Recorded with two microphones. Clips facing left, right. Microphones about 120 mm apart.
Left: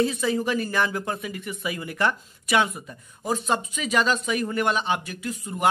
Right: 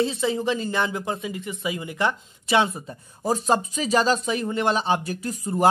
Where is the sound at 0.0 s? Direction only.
25° right (ahead or behind).